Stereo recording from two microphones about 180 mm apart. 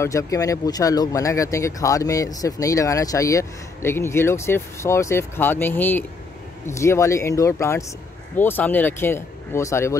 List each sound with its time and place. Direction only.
0.0 s speech: 15° left (ahead or behind)